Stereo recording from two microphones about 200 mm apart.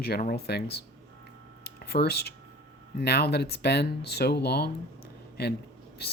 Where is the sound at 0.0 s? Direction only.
50° left (ahead or behind).